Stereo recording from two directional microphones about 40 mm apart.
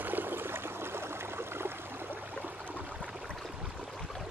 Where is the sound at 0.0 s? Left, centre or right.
Right.